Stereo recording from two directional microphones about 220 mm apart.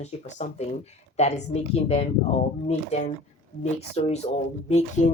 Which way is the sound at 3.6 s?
30° left (ahead or behind).